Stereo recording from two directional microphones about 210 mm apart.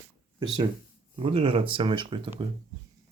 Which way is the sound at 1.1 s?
25° right (ahead or behind).